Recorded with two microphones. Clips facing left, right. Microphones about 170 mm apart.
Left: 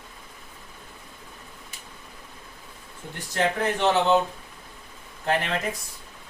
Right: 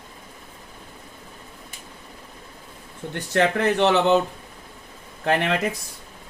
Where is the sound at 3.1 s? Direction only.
70° right (ahead or behind).